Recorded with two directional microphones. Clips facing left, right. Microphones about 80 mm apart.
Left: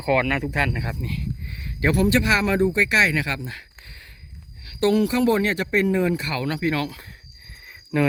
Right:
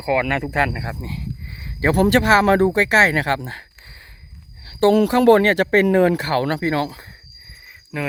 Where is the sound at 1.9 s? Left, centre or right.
Right.